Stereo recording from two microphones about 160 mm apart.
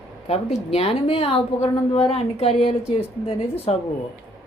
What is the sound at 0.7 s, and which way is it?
A woman's voice, 40° left (ahead or behind).